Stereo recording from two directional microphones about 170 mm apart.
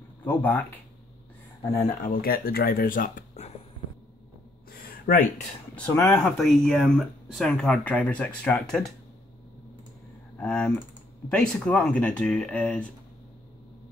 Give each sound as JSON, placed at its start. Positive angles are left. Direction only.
{"t": 0.2, "sound": "speech", "side_deg": 10}
{"t": 2.0, "sound": "speech", "side_deg": 60}
{"t": 4.6, "sound": "a sound", "side_deg": 60}
{"t": 5.9, "sound": "speech", "side_deg": 20}
{"t": 6.2, "sound": "speech", "side_deg": 0}
{"t": 10.3, "sound": "speech", "side_deg": 5}